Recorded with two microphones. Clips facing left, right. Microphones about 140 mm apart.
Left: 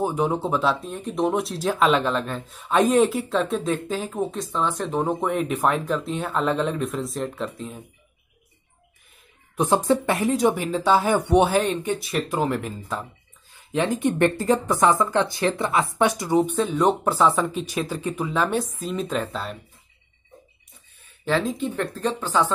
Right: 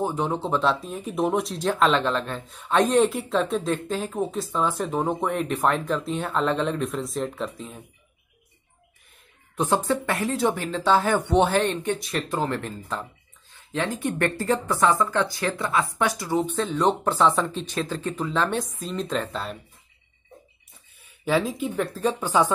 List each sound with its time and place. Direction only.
0.0 s speech: 10° left (ahead or behind)
9.8 s speech: 20° left (ahead or behind); by 19.6 s centre (ahead or behind)
21.0 s speech: 10° right (ahead or behind)